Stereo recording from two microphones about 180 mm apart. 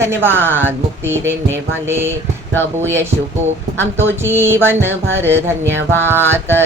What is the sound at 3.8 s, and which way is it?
Music, 15° right (ahead or behind).